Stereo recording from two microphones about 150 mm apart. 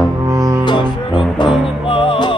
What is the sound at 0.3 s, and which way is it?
Music, 20° right (ahead or behind).